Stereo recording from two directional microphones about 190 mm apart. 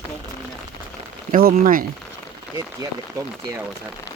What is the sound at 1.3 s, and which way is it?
Speech, 45° right (ahead or behind).